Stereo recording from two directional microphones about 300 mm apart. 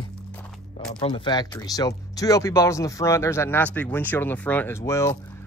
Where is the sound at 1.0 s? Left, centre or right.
Centre.